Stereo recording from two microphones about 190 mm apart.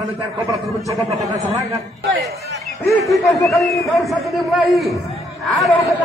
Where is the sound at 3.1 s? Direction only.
15° left (ahead or behind).